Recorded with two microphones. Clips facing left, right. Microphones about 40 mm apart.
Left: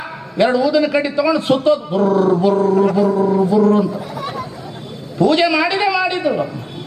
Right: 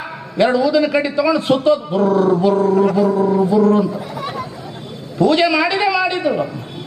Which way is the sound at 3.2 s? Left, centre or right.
Centre.